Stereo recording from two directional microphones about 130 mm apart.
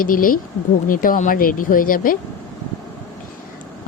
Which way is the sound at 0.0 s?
90° left.